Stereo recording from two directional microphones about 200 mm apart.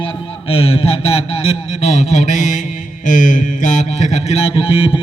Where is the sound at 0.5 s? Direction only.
30° left (ahead or behind).